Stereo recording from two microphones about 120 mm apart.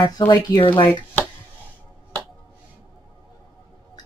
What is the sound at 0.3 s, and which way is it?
Speech, 40° left (ahead or behind).